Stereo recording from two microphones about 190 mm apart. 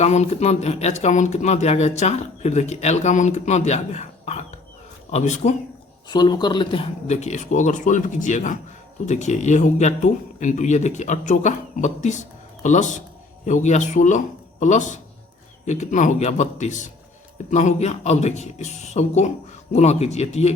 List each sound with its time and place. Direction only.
0.0 s speech: 35° left (ahead or behind)
6.1 s speech: 25° left (ahead or behind)